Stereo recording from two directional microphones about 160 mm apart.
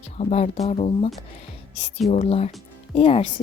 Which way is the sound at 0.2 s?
45° left (ahead or behind).